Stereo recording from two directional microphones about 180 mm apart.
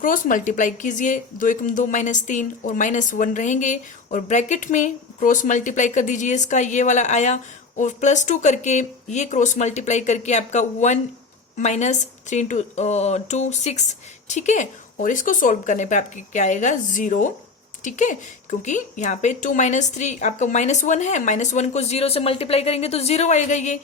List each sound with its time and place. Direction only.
0.0 s a woman's voice: 50° left (ahead or behind)